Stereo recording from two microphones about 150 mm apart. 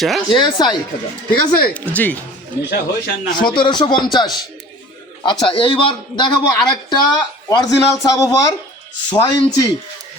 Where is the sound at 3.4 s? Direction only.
30° left (ahead or behind).